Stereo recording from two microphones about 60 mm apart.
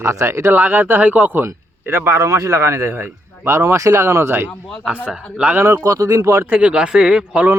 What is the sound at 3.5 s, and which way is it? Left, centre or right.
Speech, right.